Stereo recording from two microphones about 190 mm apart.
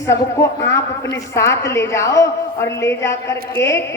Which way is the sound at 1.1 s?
15° left (ahead or behind).